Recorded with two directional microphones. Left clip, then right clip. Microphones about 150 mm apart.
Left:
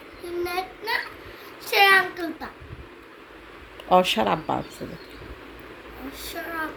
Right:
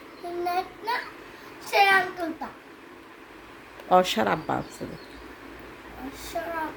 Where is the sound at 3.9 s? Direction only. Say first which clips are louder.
Left 2 dB; centre (ahead or behind).